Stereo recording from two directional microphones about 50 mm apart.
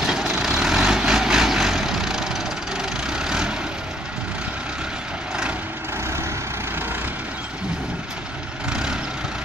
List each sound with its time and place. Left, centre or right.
0.0 s vehicle: centre
8.6 s vehicle: centre